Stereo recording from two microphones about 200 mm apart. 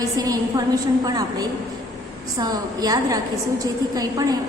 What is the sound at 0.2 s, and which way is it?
Speech, 20° right (ahead or behind).